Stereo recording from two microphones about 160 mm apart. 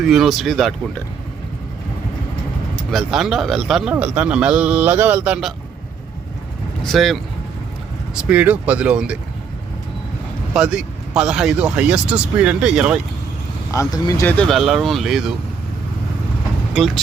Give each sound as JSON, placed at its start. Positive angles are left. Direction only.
{"t": 0.0, "sound": "speech", "side_deg": 0}
{"t": 2.7, "sound": "a man's voice", "side_deg": 0}
{"t": 6.8, "sound": "a man's voice", "side_deg": 0}
{"t": 10.5, "sound": "speech", "side_deg": -5}
{"t": 13.7, "sound": "speech", "side_deg": 20}
{"t": 14.3, "sound": "speech", "side_deg": 0}
{"t": 16.7, "sound": "speech", "side_deg": 0}